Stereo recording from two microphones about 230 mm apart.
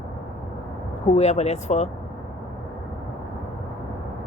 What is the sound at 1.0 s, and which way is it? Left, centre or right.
Speech, left.